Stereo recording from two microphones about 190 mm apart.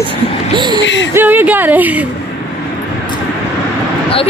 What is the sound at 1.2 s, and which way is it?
Speech, 10° right (ahead or behind).